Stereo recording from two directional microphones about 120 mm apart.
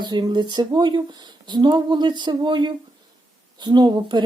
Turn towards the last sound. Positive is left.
turn(degrees=-40)  # may be behind; listen again after turning